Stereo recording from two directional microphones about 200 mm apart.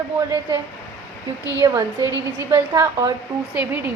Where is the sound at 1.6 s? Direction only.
20° right (ahead or behind).